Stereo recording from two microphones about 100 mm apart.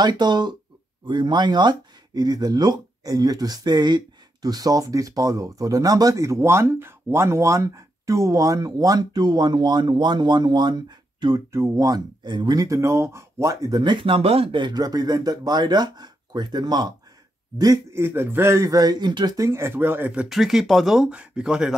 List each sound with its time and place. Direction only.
0.0 s speech: 45° right (ahead or behind)
11.5 s speech: 30° right (ahead or behind); by 12.6 s 45° right (ahead or behind)
12.6 s speech: 30° right (ahead or behind); by 14.6 s 75° right (ahead or behind)
14.6 s speech: 40° right (ahead or behind)
17.9 s a man's voice: 25° right (ahead or behind)
20.1 s speech: 5° right (ahead or behind)